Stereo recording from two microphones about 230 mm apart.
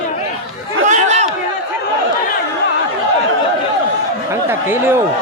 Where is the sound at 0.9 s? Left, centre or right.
Right.